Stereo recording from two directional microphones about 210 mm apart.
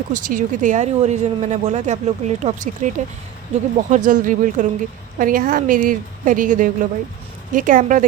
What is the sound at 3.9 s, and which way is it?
Speech, 35° right (ahead or behind).